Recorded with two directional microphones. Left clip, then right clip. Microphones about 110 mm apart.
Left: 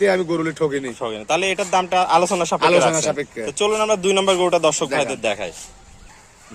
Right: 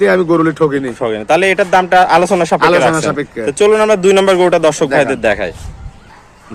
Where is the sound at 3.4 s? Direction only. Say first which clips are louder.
Right 9 dB; 55° right (ahead or behind).